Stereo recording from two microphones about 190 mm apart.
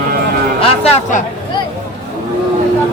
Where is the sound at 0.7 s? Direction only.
30° left (ahead or behind).